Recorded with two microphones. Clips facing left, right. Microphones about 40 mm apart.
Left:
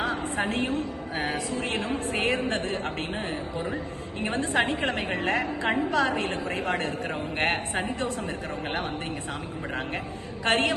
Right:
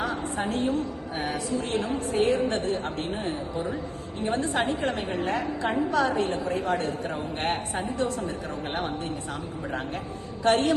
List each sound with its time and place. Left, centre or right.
0.0 s a woman's voice: left
10.4 s a woman's voice: left